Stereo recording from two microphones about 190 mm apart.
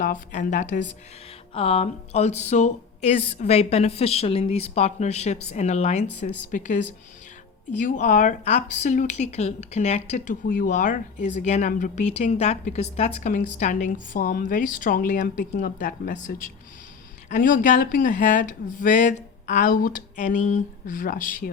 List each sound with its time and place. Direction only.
0.0 s speech: 45° left (ahead or behind)